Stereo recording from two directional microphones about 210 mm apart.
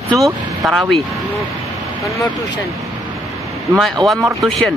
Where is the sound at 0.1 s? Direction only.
Centre (ahead or behind).